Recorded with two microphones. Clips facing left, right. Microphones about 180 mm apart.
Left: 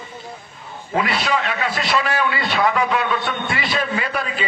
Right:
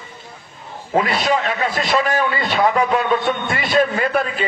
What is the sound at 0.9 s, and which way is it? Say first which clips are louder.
A man's voice: right 3 dB; 45° right (ahead or behind).